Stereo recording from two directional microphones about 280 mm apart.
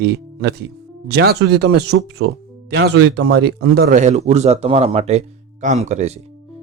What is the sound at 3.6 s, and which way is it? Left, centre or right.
Speech, right.